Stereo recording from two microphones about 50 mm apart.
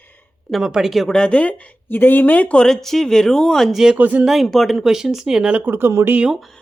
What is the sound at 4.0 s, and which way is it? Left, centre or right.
Speech, right.